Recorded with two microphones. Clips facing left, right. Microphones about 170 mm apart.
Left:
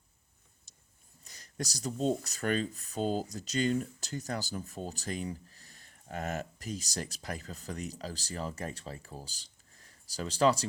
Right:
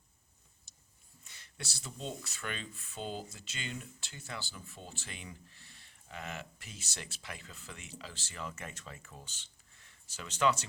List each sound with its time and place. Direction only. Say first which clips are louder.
1.2 s speech: left 10 dB; 40° left (ahead or behind)